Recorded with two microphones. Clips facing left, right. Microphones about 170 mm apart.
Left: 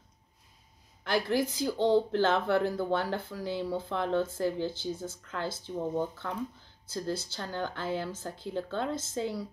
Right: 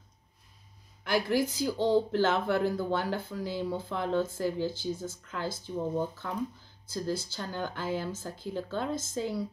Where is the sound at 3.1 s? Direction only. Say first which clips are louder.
Even; 10° right (ahead or behind).